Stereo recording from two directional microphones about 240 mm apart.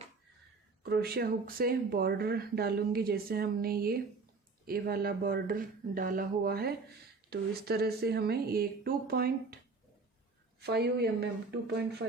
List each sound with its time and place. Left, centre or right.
0.8 s speech: right
10.6 s a woman's voice: right